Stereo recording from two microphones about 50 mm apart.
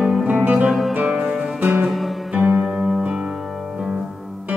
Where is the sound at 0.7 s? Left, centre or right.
Centre.